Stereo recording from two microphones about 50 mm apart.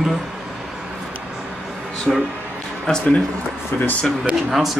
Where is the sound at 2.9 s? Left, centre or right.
Centre.